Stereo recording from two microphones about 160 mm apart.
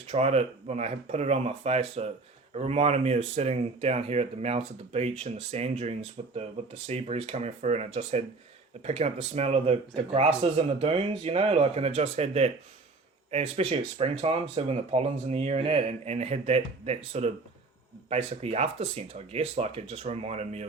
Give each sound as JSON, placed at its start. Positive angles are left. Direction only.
{"t": 0.1, "sound": "speech", "side_deg": -40}